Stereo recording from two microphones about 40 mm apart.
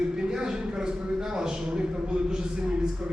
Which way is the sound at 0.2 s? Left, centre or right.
Centre.